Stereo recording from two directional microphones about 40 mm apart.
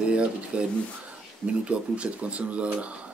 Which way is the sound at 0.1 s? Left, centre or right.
Right.